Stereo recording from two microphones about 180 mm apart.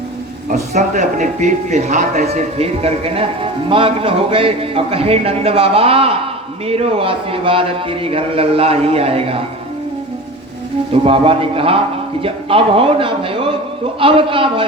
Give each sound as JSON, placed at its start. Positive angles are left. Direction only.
{"t": 0.7, "sound": "a man's voice", "side_deg": -45}
{"t": 11.0, "sound": "a man's voice", "side_deg": -30}